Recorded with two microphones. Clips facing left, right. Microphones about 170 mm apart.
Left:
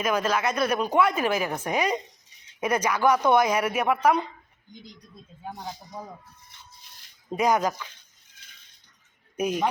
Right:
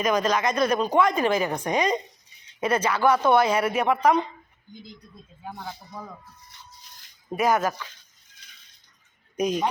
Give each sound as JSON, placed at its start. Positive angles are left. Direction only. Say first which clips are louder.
{"t": 0.0, "sound": "a woman's voice", "louder": "right 2 dB", "side_deg": 5}
{"t": 5.5, "sound": "speech", "louder": "even", "side_deg": 20}
{"t": 7.3, "sound": "a woman's voice", "louder": "even", "side_deg": 15}
{"t": 9.3, "sound": "speech", "louder": "right 2 dB", "side_deg": 10}